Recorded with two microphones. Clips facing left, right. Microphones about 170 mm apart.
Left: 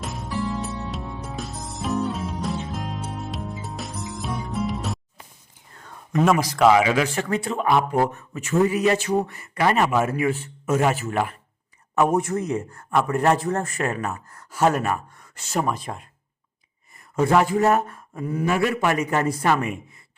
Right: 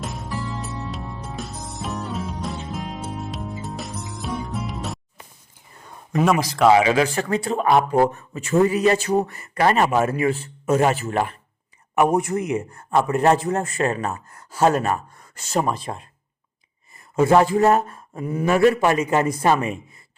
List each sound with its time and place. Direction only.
0.0 s music: centre (ahead or behind)
5.7 s whispering: 10° right (ahead or behind)
6.7 s speech: 30° right (ahead or behind)
11.9 s speech: 15° right (ahead or behind)
18.4 s speech: 40° right (ahead or behind)